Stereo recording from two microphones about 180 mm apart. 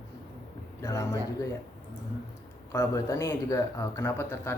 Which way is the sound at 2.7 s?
15° left (ahead or behind).